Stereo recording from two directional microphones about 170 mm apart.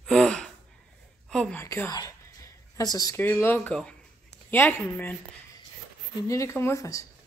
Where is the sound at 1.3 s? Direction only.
5° left (ahead or behind).